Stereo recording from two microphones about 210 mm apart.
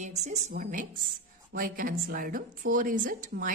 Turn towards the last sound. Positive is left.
turn(degrees=-40)  # may be behind; listen again after turning